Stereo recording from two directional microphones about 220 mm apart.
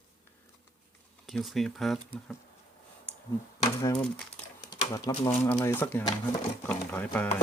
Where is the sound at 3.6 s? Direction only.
15° left (ahead or behind).